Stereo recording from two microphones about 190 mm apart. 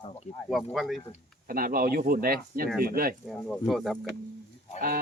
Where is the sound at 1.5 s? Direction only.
50° right (ahead or behind).